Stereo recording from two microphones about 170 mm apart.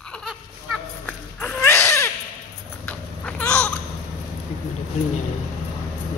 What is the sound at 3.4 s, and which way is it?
Babbling, 5° left (ahead or behind).